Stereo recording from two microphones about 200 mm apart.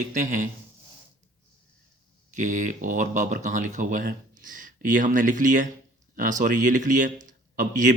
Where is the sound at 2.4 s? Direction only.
40° right (ahead or behind).